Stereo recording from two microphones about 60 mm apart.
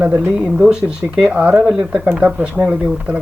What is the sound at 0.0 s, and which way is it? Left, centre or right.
Speech, right.